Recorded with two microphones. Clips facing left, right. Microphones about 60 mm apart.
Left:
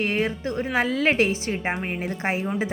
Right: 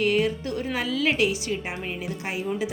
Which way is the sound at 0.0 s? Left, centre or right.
Left.